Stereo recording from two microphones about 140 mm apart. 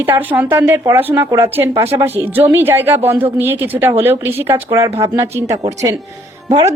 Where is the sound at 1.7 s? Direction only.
45° right (ahead or behind).